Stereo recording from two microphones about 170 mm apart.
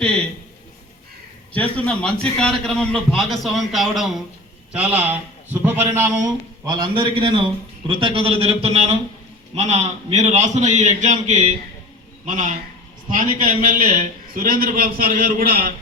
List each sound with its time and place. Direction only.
0.0 s a man's voice: 5° left (ahead or behind)
1.5 s a man's voice: 10° left (ahead or behind); by 15.7 s 60° right (ahead or behind)